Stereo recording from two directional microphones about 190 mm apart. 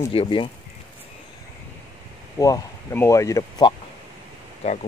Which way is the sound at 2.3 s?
15° left (ahead or behind).